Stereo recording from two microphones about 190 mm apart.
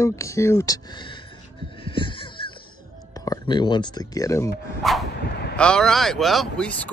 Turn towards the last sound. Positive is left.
turn(degrees=0)  # may be behind; listen again after turning